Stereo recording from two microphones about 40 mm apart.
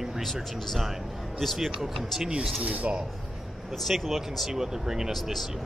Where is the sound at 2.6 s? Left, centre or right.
Right.